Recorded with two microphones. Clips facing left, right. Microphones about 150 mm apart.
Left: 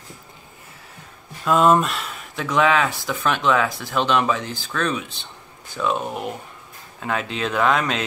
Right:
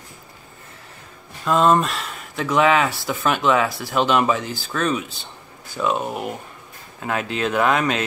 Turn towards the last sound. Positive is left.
turn(degrees=-5)  # may be behind; listen again after turning